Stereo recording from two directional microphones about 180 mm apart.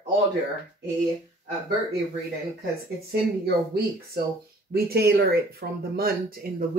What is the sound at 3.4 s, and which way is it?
Speech, 60° right (ahead or behind).